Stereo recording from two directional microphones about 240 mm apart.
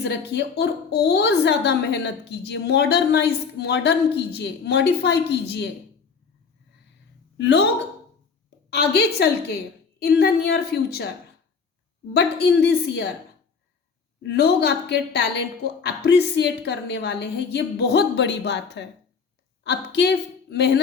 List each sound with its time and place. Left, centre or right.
0.0 s a woman's voice: left
7.3 s a woman's voice: left
8.7 s a woman's voice: left
12.1 s a woman's voice: left
14.2 s a woman's voice: left